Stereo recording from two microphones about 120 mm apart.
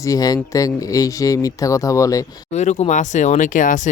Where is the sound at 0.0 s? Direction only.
30° left (ahead or behind).